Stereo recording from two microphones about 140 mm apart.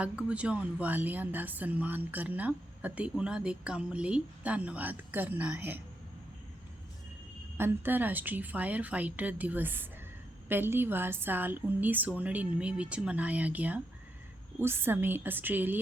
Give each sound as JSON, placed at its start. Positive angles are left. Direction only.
{"t": 0.0, "sound": "a woman's voice", "side_deg": -10}
{"t": 7.5, "sound": "a woman's voice", "side_deg": -15}